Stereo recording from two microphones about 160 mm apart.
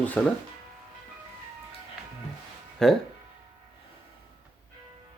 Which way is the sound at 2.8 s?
5° left (ahead or behind).